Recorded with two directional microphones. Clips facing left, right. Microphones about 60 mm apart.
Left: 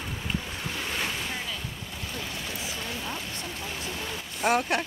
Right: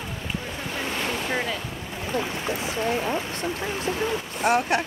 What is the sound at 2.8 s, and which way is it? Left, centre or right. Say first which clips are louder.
Speech: right 10 dB; right.